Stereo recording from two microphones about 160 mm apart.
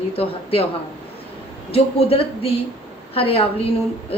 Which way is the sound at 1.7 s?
35° left (ahead or behind).